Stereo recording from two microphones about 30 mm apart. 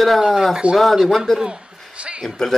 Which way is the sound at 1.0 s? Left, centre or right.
Centre.